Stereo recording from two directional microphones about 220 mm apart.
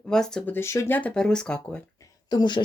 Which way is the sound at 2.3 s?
20° left (ahead or behind).